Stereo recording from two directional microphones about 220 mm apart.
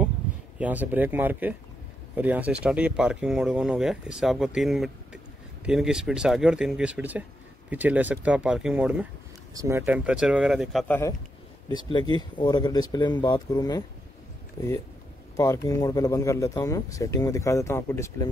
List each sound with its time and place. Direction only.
0.6 s speech: 5° right (ahead or behind)
11.7 s speech: 20° left (ahead or behind)